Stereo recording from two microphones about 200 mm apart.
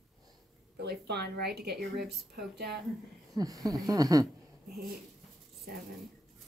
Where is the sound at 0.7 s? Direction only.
55° right (ahead or behind).